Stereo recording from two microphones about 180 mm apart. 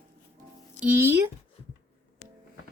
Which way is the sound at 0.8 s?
10° right (ahead or behind).